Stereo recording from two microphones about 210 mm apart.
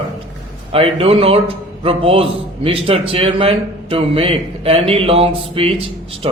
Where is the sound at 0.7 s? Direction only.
25° right (ahead or behind).